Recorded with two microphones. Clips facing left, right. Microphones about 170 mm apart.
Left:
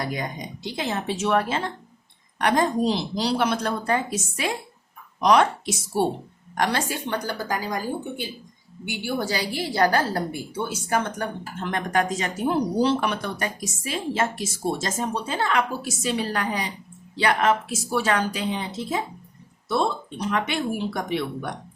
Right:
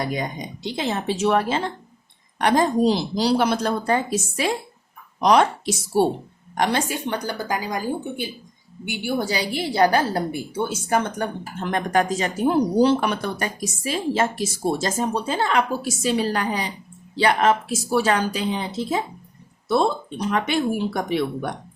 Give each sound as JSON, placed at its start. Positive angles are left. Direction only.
{"t": 0.0, "sound": "a woman's voice", "side_deg": -25}
{"t": 6.6, "sound": "a woman's voice", "side_deg": -20}
{"t": 12.8, "sound": "a woman's voice", "side_deg": -45}